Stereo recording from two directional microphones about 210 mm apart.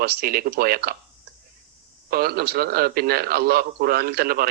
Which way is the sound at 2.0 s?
45° right (ahead or behind).